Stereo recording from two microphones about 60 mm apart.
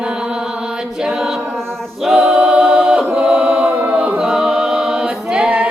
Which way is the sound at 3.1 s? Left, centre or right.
Centre.